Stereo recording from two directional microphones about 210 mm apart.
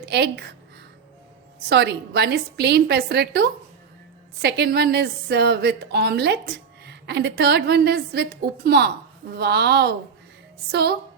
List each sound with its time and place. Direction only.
0.0 s a woman's voice: 50° right (ahead or behind)
1.7 s a woman's voice: 55° right (ahead or behind)